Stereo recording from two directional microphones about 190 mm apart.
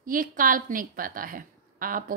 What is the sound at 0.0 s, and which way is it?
A woman's voice, 45° right (ahead or behind).